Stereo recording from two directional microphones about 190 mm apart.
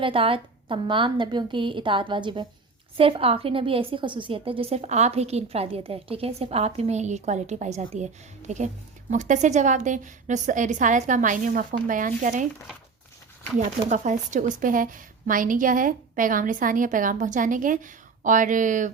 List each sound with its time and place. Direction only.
0.0 s a woman's voice: 30° right (ahead or behind); by 12.5 s 45° right (ahead or behind)
13.6 s a woman's voice: 40° right (ahead or behind)